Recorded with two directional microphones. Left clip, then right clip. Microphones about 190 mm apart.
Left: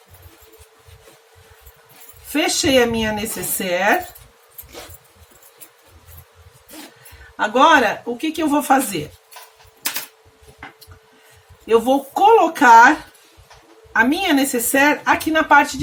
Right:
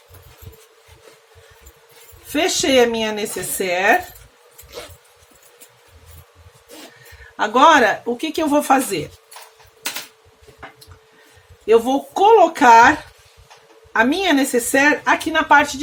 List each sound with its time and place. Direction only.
2.3 s speech: 20° right (ahead or behind)
7.3 s a man's voice: 30° right (ahead or behind)
11.6 s speech: 25° right (ahead or behind)
13.9 s speech: 25° right (ahead or behind)